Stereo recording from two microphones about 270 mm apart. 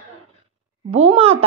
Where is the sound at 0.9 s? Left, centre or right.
Right.